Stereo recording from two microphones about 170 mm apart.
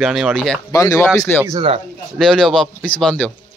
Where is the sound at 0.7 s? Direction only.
15° left (ahead or behind).